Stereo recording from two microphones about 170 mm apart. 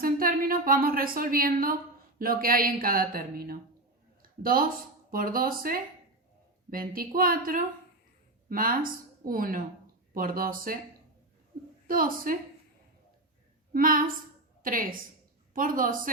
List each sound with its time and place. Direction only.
0.0 s speech: 60° right (ahead or behind)
4.2 s a sound: 55° right (ahead or behind)
5.1 s speech: 55° right (ahead or behind)
11.5 s a sound: 55° right (ahead or behind)
11.9 s speech: 55° right (ahead or behind)
13.7 s a woman's voice: 55° right (ahead or behind)